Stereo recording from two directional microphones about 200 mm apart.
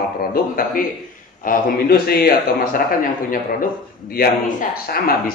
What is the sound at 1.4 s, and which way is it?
Speech, 50° left (ahead or behind).